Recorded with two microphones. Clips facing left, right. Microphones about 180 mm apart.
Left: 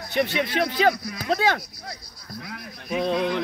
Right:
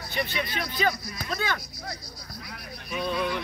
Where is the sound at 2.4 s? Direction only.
90° left.